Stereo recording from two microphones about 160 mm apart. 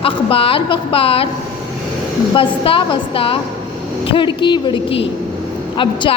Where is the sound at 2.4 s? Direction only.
35° left (ahead or behind).